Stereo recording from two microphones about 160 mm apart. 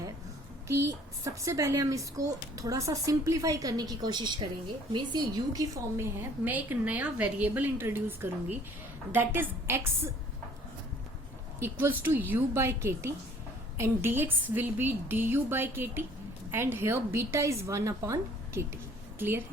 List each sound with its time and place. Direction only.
0.9 s a woman's voice: 20° right (ahead or behind)
11.6 s a woman's voice: 15° right (ahead or behind)